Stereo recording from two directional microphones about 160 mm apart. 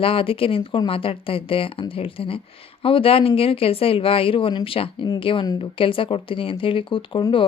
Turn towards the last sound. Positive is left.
turn(degrees=30)  # may be behind; listen again after turning